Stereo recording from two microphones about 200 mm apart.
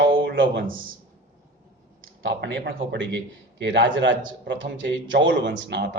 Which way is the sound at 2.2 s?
60° right (ahead or behind).